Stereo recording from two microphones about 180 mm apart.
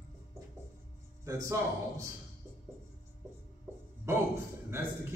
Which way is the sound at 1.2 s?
15° right (ahead or behind).